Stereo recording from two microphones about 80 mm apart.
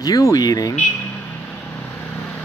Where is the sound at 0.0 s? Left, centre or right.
Left.